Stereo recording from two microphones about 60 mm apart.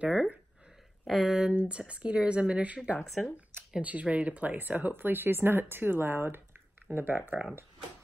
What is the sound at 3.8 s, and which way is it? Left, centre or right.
Speech, right.